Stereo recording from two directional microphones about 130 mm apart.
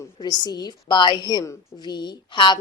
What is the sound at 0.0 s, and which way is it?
A woman's voice, 30° left (ahead or behind).